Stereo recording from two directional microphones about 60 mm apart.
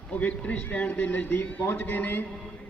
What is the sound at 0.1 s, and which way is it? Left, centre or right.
A man's voice, left.